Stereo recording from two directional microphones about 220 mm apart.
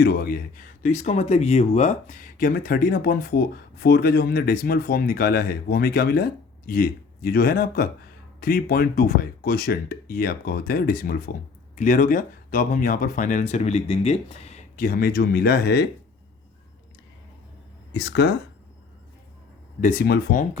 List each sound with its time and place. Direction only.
0.0 s speech: 45° left (ahead or behind)
17.9 s speech: 50° left (ahead or behind)
19.8 s speech: 40° left (ahead or behind)